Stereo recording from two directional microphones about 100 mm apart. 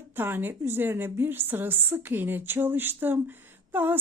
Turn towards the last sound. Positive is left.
turn(degrees=-20)  # may be behind; listen again after turning